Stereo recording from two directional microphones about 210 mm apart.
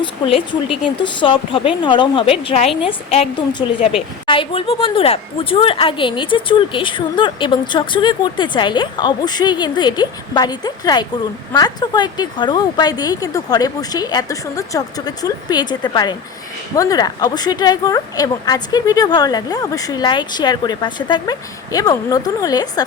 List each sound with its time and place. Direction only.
0.0 s a woman's voice: 25° left (ahead or behind)
4.3 s a woman's voice: 25° left (ahead or behind)